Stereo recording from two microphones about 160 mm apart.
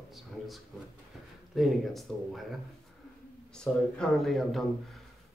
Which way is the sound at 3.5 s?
5° left (ahead or behind).